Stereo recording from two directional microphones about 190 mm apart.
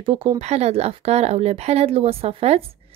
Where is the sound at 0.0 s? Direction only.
30° right (ahead or behind).